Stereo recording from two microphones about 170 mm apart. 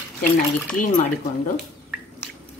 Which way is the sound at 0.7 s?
50° left (ahead or behind).